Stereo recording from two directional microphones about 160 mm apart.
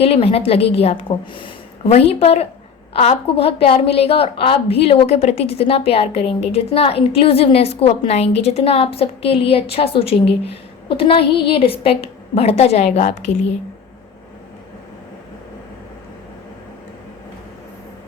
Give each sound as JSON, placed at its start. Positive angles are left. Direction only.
{"t": 0.0, "sound": "a woman's voice", "side_deg": 40}